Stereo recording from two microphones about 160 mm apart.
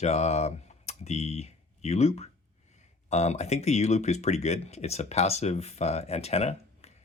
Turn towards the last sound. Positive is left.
turn(degrees=40)  # may be behind; listen again after turning